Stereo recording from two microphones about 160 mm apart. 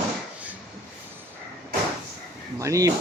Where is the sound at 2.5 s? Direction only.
20° right (ahead or behind).